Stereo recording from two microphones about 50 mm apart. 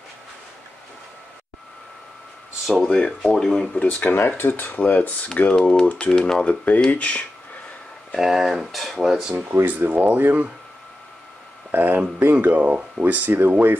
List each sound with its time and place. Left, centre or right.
2.7 s speech: centre
3.8 s speech: left
5.6 s speech: centre
6.4 s speech: left
8.2 s speech: centre
9.7 s speech: right
11.7 s a sound: right
12.2 s speech: right